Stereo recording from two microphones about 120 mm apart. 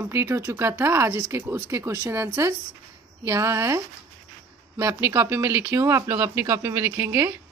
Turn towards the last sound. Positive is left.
turn(degrees=-20)  # may be behind; listen again after turning